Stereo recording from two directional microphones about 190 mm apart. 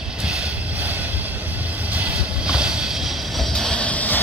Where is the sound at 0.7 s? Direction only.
10° right (ahead or behind).